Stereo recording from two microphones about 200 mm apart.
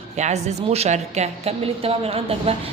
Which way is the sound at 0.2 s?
35° right (ahead or behind).